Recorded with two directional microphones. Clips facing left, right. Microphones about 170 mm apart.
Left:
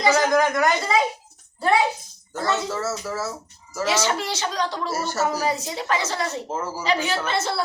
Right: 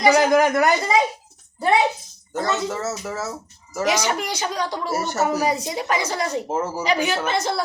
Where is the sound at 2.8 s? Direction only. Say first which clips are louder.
Even; 20° right (ahead or behind).